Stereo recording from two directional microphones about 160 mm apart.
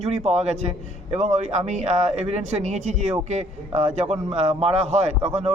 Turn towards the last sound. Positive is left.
turn(degrees=-40)  # may be behind; listen again after turning